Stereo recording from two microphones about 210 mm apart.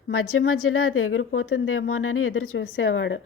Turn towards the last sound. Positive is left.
turn(degrees=60)  # may be behind; listen again after turning